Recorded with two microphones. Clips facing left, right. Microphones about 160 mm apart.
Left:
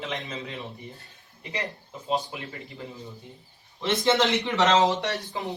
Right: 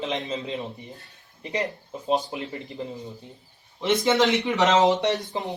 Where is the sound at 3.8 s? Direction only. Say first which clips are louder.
Right 2 dB; 15° right (ahead or behind).